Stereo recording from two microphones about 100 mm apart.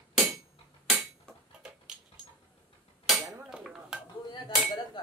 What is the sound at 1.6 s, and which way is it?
Dog, 5° right (ahead or behind).